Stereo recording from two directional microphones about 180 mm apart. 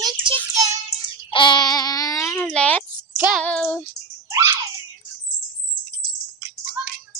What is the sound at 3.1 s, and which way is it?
Child singing, 5° right (ahead or behind).